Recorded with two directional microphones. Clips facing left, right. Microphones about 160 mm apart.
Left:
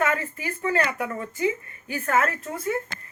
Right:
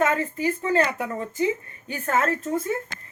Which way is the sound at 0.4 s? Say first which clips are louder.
Right 3 dB; 25° right (ahead or behind).